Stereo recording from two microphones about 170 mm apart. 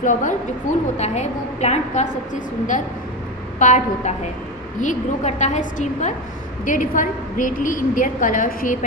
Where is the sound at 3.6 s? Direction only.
45° left (ahead or behind).